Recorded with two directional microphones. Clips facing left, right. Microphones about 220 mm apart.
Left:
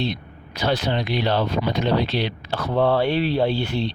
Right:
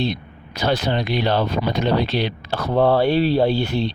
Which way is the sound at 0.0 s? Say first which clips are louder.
Right 3 dB; 40° right (ahead or behind).